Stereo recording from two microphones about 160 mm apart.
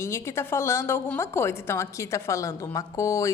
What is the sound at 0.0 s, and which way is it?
A woman's voice, 15° left (ahead or behind).